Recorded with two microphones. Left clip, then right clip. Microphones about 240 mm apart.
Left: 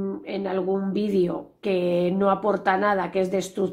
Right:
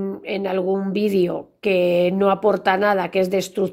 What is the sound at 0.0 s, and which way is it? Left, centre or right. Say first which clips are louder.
Speech: right 4 dB; right.